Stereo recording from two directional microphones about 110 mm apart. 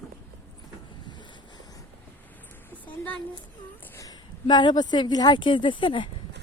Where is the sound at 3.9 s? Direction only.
30° left (ahead or behind).